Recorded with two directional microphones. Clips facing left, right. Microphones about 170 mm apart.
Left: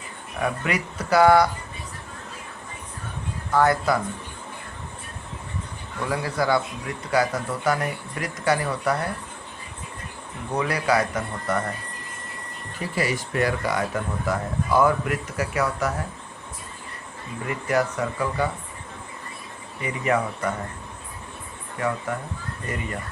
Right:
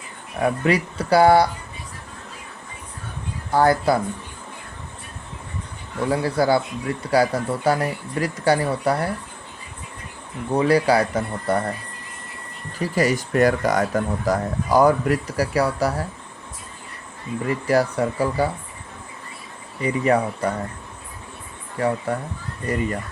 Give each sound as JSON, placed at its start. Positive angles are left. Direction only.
{"t": 0.3, "sound": "speech", "side_deg": -35}
{"t": 3.5, "sound": "speech", "side_deg": -30}
{"t": 6.1, "sound": "speech", "side_deg": -30}
{"t": 10.5, "sound": "speech", "side_deg": -30}
{"t": 12.8, "sound": "speech", "side_deg": -40}
{"t": 17.5, "sound": "speech", "side_deg": -35}
{"t": 19.8, "sound": "speech", "side_deg": -35}
{"t": 21.8, "sound": "speech", "side_deg": -35}